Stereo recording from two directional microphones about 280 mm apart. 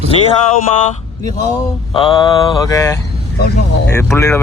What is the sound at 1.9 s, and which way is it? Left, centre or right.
A man's voice, centre.